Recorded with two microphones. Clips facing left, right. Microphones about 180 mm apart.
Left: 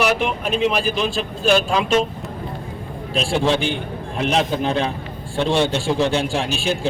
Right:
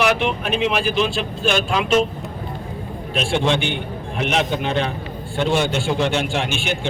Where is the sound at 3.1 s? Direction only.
35° left (ahead or behind).